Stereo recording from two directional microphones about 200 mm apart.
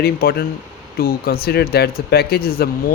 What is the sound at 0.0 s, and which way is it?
Speech, 50° left (ahead or behind).